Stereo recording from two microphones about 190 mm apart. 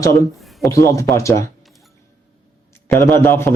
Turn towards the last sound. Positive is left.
turn(degrees=15)  # may be behind; listen again after turning